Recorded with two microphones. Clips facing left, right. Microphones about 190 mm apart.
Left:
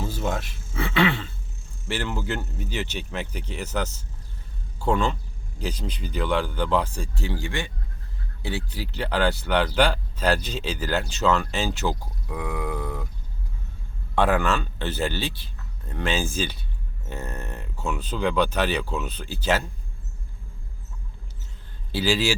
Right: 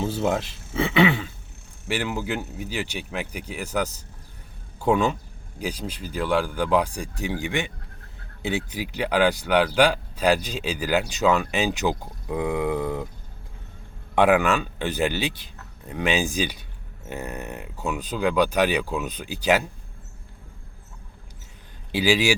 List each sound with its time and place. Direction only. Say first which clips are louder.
0.0 s a sound: right 4 dB; 25° right (ahead or behind)
0.8 s speech: right 3 dB; 20° right (ahead or behind)
14.2 s speech: right 3 dB; 15° right (ahead or behind)
21.9 s speech: right 2 dB; 15° right (ahead or behind)